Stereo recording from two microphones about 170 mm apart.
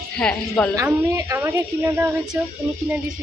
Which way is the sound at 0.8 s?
15° right (ahead or behind).